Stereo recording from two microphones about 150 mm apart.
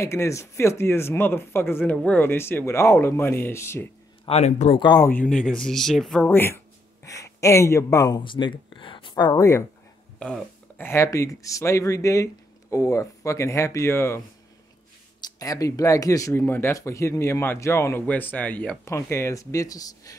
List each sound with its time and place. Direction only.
0.0 s speech: 20° left (ahead or behind)
4.3 s speech: 50° left (ahead or behind)
4.7 s speech: 30° left (ahead or behind)
5.3 s speech: 5° left (ahead or behind)
6.2 s speech: 15° left (ahead or behind)
8.2 s speech: 35° left (ahead or behind)
10.1 s a sound: 5° left (ahead or behind)
10.9 s speech: 20° left (ahead or behind)